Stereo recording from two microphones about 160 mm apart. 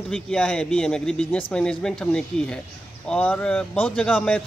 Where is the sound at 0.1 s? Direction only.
5° left (ahead or behind).